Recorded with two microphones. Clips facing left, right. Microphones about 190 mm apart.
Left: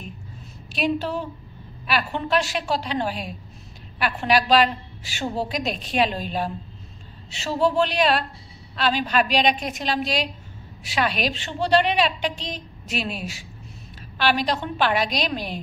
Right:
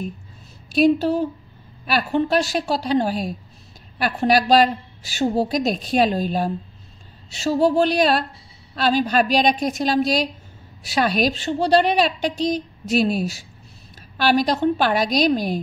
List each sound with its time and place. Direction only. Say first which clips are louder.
0.7 s a woman's voice: right 8 dB; 40° right (ahead or behind)